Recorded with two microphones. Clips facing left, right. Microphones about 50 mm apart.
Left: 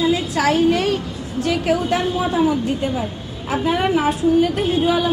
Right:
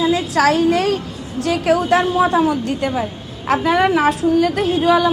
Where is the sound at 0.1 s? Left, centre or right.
Right.